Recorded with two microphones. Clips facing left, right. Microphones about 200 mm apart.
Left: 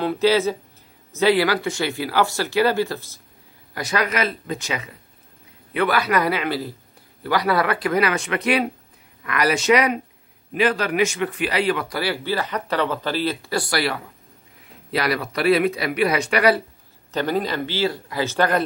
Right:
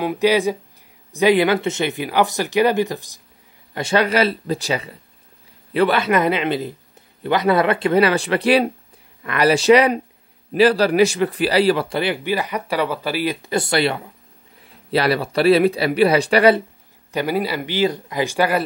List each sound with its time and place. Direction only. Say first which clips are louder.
0.0 s speech: right 1 dB; 15° right (ahead or behind)
3.7 s a man's voice: right 5 dB; 30° right (ahead or behind)
17.1 s speech: right 1 dB; 10° right (ahead or behind)